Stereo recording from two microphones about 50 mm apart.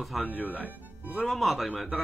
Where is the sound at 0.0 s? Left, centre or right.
Centre.